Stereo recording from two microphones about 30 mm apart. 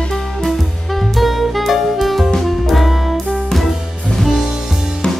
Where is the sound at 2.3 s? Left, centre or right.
Centre.